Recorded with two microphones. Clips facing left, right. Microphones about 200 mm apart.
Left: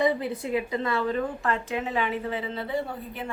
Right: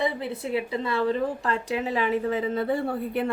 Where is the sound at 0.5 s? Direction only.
30° right (ahead or behind).